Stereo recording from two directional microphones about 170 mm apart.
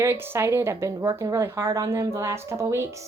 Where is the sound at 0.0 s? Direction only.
15° right (ahead or behind).